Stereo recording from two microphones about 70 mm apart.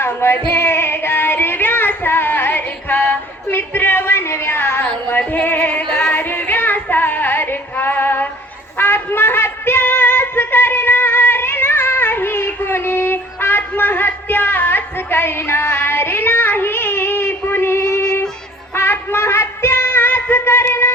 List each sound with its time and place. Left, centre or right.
0.0 s female singing: left
0.5 s music: left
4.9 s female singing: left
8.8 s music: left
15.7 s child singing: left
18.8 s a sound: left